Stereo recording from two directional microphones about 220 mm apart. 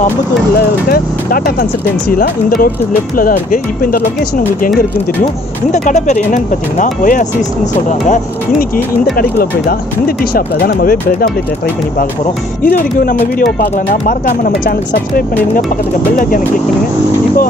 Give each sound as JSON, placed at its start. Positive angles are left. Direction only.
{"t": 0.6, "sound": "speech", "side_deg": 40}
{"t": 9.1, "sound": "speech", "side_deg": 40}
{"t": 12.6, "sound": "speech", "side_deg": 40}
{"t": 16.2, "sound": "speech", "side_deg": 40}